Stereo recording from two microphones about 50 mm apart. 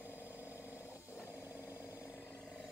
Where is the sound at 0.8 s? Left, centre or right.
Left.